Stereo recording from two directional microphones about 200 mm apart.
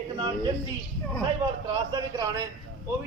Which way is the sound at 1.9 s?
20° right (ahead or behind).